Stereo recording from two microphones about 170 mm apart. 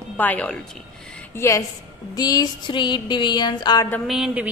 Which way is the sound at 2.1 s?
20° left (ahead or behind).